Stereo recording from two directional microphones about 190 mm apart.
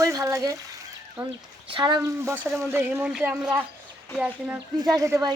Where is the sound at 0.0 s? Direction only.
15° right (ahead or behind).